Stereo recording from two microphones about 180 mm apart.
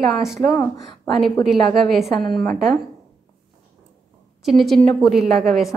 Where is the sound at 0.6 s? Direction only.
20° left (ahead or behind).